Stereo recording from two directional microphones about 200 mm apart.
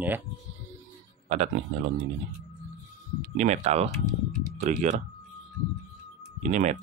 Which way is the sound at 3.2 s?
35° right (ahead or behind).